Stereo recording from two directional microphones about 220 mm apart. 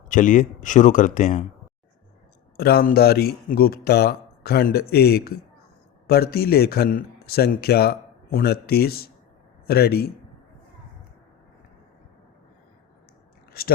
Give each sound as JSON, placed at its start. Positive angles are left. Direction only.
{"t": 0.1, "sound": "speech", "side_deg": 35}
{"t": 2.6, "sound": "a man's voice", "side_deg": 45}